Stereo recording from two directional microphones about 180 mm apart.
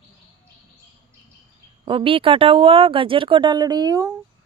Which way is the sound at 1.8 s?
30° right (ahead or behind).